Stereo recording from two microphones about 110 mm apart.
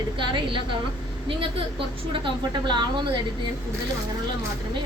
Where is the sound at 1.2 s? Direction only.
55° right (ahead or behind).